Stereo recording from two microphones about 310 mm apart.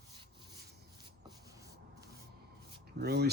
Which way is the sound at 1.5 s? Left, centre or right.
Centre.